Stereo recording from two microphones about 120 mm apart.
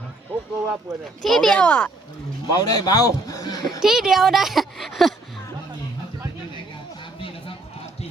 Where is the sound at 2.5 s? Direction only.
35° left (ahead or behind).